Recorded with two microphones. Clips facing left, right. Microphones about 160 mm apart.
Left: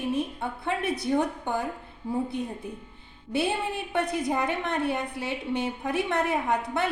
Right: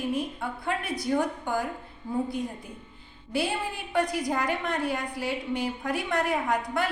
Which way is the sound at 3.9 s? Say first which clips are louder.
Right 1 dB; 25° left (ahead or behind).